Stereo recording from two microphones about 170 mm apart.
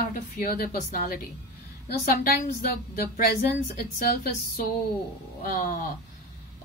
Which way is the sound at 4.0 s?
60° left (ahead or behind).